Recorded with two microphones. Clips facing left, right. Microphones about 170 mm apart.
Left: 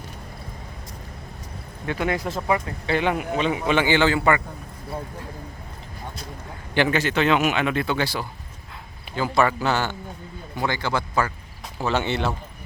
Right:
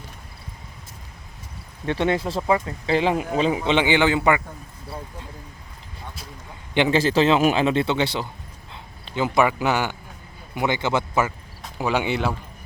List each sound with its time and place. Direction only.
1.9 s speech: 30° right (ahead or behind)
3.7 s a man's voice: 20° right (ahead or behind)
6.7 s a man's voice: 20° right (ahead or behind)